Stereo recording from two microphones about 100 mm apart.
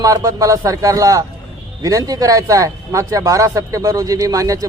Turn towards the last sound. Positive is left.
turn(degrees=-35)  # may be behind; listen again after turning